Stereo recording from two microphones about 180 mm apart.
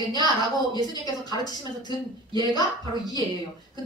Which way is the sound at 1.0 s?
20° left (ahead or behind).